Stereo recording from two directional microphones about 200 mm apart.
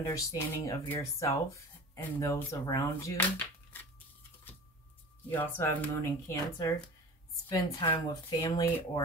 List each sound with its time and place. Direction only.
0.0 s speech: 15° left (ahead or behind)
5.3 s speech: 10° left (ahead or behind)
7.9 s speech: 15° left (ahead or behind)